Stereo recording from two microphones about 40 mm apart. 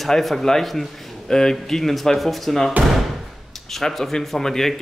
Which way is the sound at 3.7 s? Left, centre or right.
Centre.